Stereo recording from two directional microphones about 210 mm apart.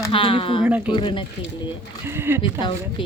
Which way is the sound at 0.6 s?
5° right (ahead or behind).